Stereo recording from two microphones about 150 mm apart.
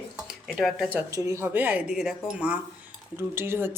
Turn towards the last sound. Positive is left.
turn(degrees=-15)  # may be behind; listen again after turning